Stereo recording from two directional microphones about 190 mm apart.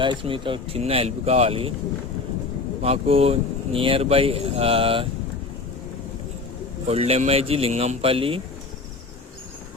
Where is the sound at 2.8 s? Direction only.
30° right (ahead or behind).